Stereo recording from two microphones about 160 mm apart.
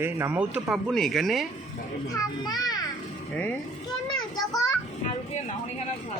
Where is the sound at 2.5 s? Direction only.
25° left (ahead or behind).